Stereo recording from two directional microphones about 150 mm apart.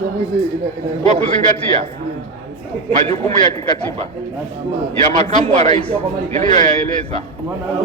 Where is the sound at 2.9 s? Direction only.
45° right (ahead or behind).